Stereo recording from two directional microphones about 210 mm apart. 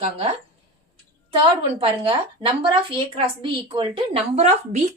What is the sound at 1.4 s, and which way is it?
A woman's voice, 25° right (ahead or behind).